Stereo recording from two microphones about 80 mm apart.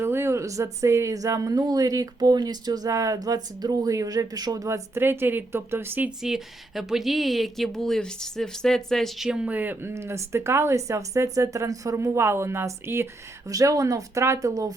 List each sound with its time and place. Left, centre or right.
0.0 s speech: right
4.9 s a woman's voice: right
6.1 s speech: centre
9.5 s a woman's voice: right
9.9 s speech: right
13.5 s speech: right